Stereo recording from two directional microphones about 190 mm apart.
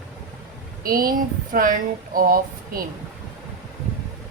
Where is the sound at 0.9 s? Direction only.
50° right (ahead or behind).